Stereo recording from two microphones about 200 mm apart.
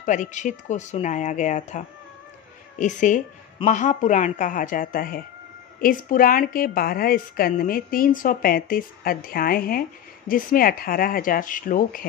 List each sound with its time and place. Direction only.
0.0 s a woman's voice: 40° left (ahead or behind)